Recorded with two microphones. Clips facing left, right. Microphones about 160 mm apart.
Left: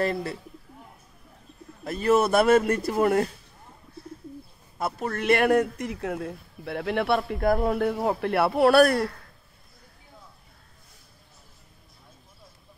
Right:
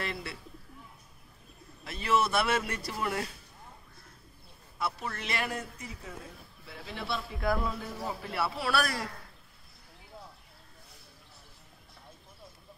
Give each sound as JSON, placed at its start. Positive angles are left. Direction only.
{"t": 0.0, "sound": "speech", "side_deg": 40}
{"t": 1.9, "sound": "speech", "side_deg": 45}
{"t": 4.7, "sound": "speech", "side_deg": 50}